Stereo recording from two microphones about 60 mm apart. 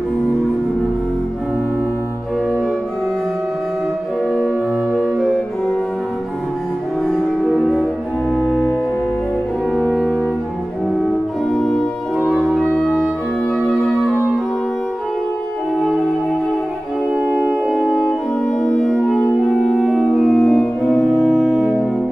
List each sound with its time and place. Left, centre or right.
7.1 s music: centre
13.7 s music: centre
17.1 s music: centre
18.6 s music: centre
21.2 s music: centre